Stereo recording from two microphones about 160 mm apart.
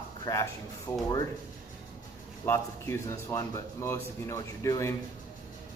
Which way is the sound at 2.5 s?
15° left (ahead or behind).